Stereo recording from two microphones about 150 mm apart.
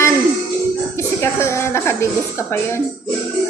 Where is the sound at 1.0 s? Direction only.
20° left (ahead or behind).